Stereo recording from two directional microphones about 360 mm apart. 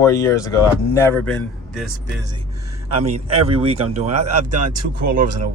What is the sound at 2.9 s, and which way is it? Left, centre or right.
A man's voice, centre.